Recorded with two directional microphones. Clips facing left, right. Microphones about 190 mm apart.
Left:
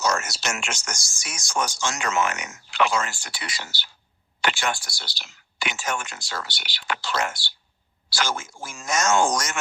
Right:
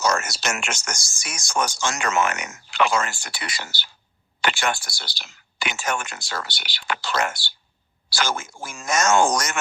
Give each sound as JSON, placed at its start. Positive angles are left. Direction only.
{"t": 0.0, "sound": "speech", "side_deg": -55}